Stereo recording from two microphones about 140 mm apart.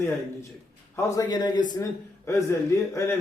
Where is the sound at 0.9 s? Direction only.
25° left (ahead or behind).